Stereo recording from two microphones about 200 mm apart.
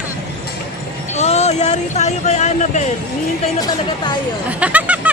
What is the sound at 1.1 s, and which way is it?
Speech, 35° left (ahead or behind).